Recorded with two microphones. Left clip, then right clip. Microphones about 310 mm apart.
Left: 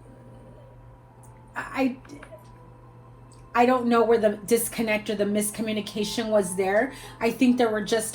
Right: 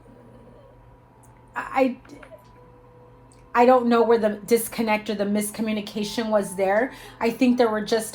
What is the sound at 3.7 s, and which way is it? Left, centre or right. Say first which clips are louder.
Speech: right 5 dB; right.